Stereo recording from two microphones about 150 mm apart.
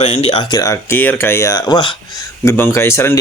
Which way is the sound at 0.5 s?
20° left (ahead or behind).